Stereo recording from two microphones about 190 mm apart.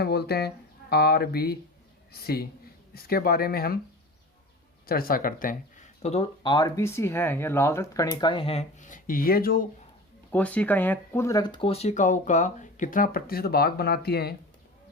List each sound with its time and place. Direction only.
0.0 s speech: 55° left (ahead or behind)
4.9 s speech: 50° left (ahead or behind); by 8.3 s 15° left (ahead or behind)
8.3 s speech: 30° left (ahead or behind); by 9.6 s 50° left (ahead or behind)
10.3 s speech: 5° left (ahead or behind); by 14.3 s 55° left (ahead or behind)